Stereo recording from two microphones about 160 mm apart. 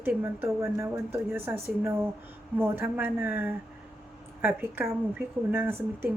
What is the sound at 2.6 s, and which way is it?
Speech, 15° right (ahead or behind).